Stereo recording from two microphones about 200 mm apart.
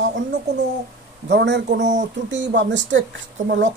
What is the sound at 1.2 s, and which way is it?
Speech, 60° right (ahead or behind).